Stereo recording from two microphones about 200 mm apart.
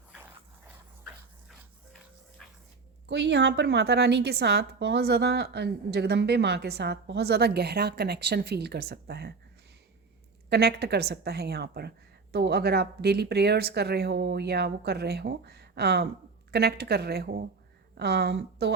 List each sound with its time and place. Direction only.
1.0 s dog: centre (ahead or behind)
2.4 s whispering: 5° left (ahead or behind)
3.1 s a woman's voice: 60° right (ahead or behind)
10.5 s a woman's voice: 55° right (ahead or behind)